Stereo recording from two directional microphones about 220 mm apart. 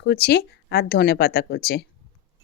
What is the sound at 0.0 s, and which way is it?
Speech, 45° left (ahead or behind).